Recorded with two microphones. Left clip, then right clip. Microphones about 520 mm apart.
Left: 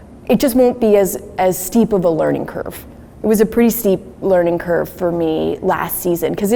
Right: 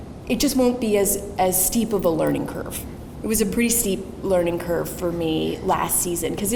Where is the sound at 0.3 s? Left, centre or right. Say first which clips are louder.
Left 8 dB; left.